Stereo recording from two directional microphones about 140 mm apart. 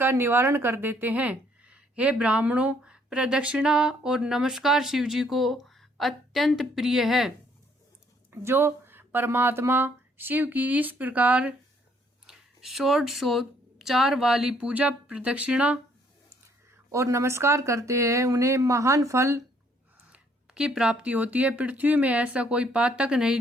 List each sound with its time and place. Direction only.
0.0 s a woman's voice: 15° right (ahead or behind)
8.3 s speech: 15° right (ahead or behind)
16.9 s speech: 20° right (ahead or behind)
20.0 s speech: 10° right (ahead or behind)